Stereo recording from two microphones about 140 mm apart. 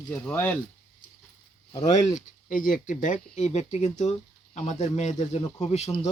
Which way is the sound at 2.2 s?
80° left.